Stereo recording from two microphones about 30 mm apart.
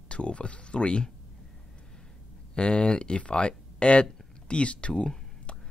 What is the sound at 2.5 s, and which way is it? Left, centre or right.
Speech, left.